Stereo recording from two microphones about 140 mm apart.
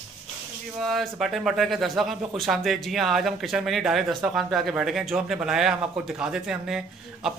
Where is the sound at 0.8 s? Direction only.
Centre (ahead or behind).